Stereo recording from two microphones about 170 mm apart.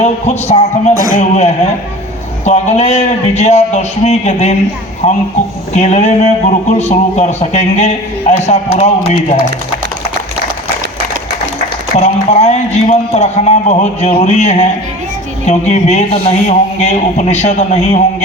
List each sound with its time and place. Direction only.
0.0 s speech: 40° left (ahead or behind)
11.9 s speech: 40° left (ahead or behind)